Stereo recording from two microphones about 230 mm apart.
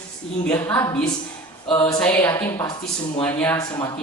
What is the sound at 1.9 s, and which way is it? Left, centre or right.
A man's voice, centre.